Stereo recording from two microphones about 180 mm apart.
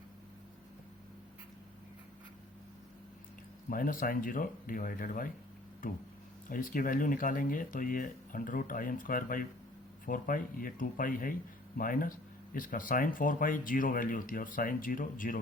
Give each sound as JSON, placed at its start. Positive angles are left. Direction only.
{"t": 3.7, "sound": "speech", "side_deg": 50}
{"t": 6.5, "sound": "speech", "side_deg": 50}